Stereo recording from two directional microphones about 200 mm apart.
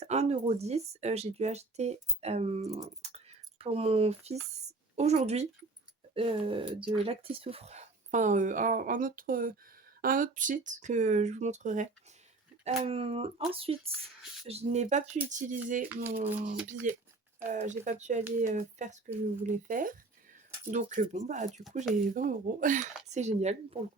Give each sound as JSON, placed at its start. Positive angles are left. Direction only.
{"t": 0.0, "sound": "speech", "side_deg": -35}